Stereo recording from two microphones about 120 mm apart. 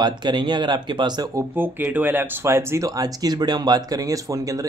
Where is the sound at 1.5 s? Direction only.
15° right (ahead or behind).